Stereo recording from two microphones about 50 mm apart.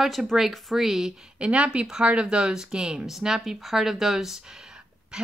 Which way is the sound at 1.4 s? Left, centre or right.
Right.